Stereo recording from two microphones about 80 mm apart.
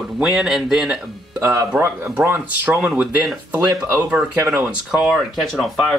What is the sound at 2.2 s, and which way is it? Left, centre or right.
Speech, right.